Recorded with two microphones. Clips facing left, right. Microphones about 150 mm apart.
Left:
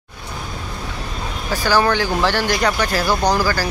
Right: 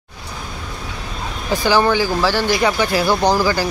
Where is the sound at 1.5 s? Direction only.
15° right (ahead or behind).